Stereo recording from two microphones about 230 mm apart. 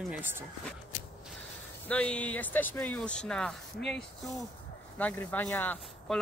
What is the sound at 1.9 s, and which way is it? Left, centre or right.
Speech, centre.